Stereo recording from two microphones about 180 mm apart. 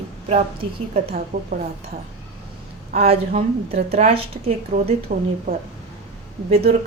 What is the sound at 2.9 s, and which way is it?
A woman's voice, 35° right (ahead or behind).